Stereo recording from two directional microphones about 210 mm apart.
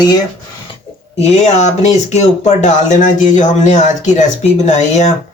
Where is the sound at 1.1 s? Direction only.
30° left (ahead or behind).